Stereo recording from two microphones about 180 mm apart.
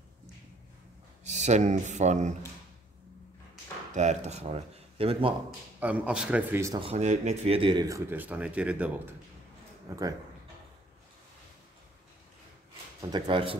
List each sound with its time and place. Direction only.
1.2 s speech: 40° right (ahead or behind)
3.9 s speech: 40° right (ahead or behind)
5.8 s speech: 10° right (ahead or behind)
6.8 s speech: 35° right (ahead or behind); by 9.1 s 10° right (ahead or behind)
9.8 s speech: 20° right (ahead or behind)
13.0 s speech: 25° right (ahead or behind)